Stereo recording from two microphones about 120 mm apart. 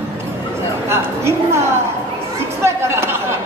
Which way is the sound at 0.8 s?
20° right (ahead or behind).